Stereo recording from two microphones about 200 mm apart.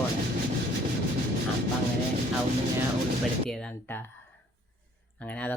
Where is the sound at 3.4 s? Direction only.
5° left (ahead or behind).